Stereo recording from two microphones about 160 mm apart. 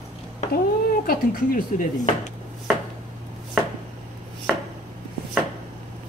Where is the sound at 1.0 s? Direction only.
60° left (ahead or behind).